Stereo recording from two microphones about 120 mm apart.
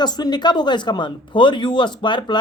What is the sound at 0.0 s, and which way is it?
A man's voice, 35° left (ahead or behind).